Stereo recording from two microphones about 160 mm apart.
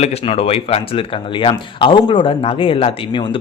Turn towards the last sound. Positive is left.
turn(degrees=35)  # may be behind; listen again after turning